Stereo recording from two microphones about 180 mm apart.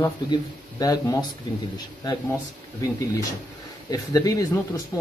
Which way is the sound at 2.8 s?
15° left (ahead or behind).